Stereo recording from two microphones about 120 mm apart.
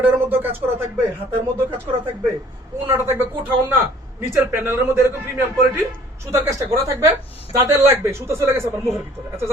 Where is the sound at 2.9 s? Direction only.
20° right (ahead or behind).